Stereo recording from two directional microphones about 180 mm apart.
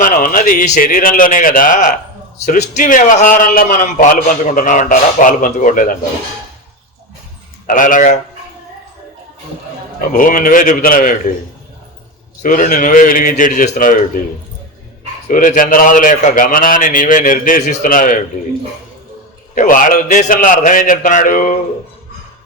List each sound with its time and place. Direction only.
0.0 s a man's voice: 50° left (ahead or behind)
7.7 s a man's voice: 45° left (ahead or behind)
10.1 s a man's voice: 50° left (ahead or behind)
12.4 s a man's voice: 45° left (ahead or behind)
15.3 s a man's voice: 50° left (ahead or behind)
19.5 s a man's voice: 50° left (ahead or behind)